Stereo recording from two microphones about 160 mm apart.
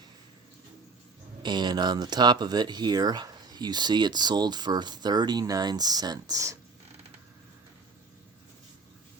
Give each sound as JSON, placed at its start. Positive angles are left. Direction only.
{"t": 1.4, "sound": "speech", "side_deg": -25}